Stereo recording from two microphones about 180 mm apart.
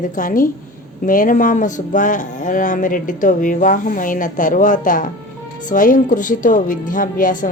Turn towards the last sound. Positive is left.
turn(degrees=50)  # may be behind; listen again after turning